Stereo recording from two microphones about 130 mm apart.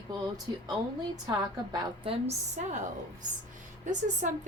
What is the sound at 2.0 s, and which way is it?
Speech, 55° right (ahead or behind).